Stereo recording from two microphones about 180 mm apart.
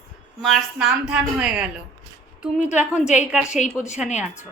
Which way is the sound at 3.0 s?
40° left (ahead or behind).